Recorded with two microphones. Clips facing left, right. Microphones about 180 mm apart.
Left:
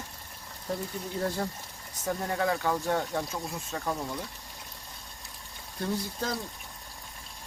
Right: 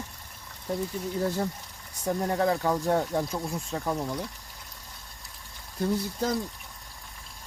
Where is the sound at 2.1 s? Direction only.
30° right (ahead or behind).